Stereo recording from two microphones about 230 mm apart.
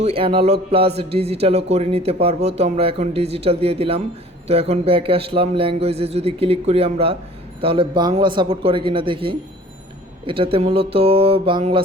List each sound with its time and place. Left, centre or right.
0.0 s speech: right